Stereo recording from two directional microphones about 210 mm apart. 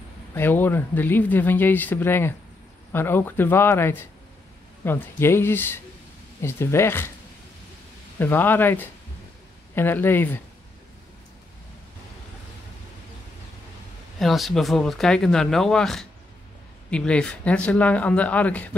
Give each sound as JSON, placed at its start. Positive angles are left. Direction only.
{"t": 0.3, "sound": "speech", "side_deg": 10}
{"t": 8.2, "sound": "speech", "side_deg": 10}
{"t": 14.2, "sound": "speech", "side_deg": 0}